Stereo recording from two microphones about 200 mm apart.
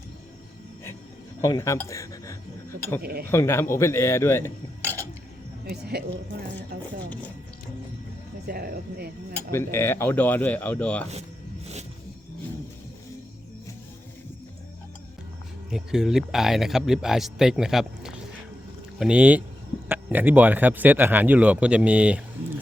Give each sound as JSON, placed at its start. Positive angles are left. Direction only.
{"t": 1.4, "sound": "a sound", "side_deg": 15}
{"t": 3.0, "sound": "speech", "side_deg": -50}
{"t": 3.2, "sound": "cutlery", "side_deg": 10}
{"t": 5.6, "sound": "speech", "side_deg": -55}
{"t": 8.4, "sound": "speech", "side_deg": -50}
{"t": 9.3, "sound": "cutlery", "side_deg": 10}
{"t": 11.6, "sound": "music", "side_deg": -35}
{"t": 15.7, "sound": "speech", "side_deg": 0}